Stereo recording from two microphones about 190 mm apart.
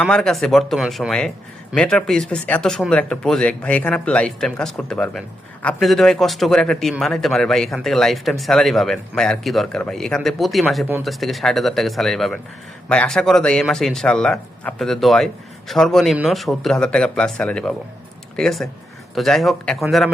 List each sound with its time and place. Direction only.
0.0 s a man's voice: 5° left (ahead or behind)